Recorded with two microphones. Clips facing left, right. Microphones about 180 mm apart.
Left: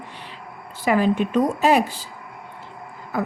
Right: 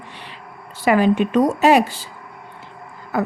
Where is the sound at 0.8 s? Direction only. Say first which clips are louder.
Right 3 dB; 75° right (ahead or behind).